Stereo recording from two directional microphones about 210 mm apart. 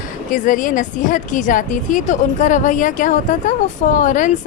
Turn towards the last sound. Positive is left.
turn(degrees=40)  # may be behind; listen again after turning